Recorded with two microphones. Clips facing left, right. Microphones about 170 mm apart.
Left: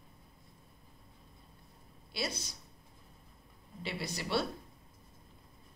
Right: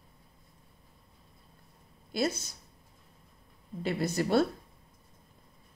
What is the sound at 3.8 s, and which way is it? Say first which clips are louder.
Speech: right 10 dB; 45° right (ahead or behind).